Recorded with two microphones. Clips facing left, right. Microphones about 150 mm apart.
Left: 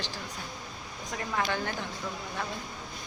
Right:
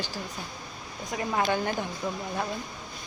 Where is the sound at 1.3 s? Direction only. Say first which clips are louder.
Right 4 dB; 20° right (ahead or behind).